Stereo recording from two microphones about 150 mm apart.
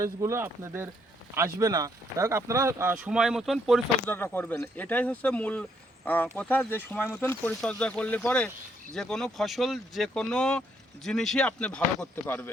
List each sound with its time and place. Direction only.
0.0 s speech: 20° right (ahead or behind); by 3.8 s centre (ahead or behind)
4.0 s speech: 15° left (ahead or behind)